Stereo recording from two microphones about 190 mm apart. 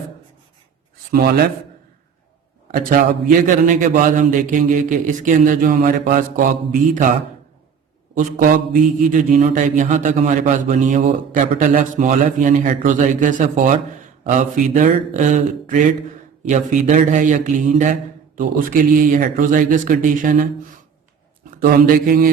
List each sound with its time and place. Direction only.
2.7 s a man's voice: 45° right (ahead or behind)
8.1 s a man's voice: 45° right (ahead or behind)
21.6 s a man's voice: 50° right (ahead or behind)